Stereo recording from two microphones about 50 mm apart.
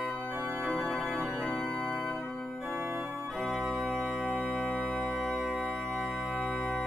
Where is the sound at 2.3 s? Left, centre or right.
Centre.